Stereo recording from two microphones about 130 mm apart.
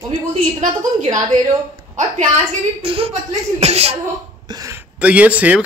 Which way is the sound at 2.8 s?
45° right (ahead or behind).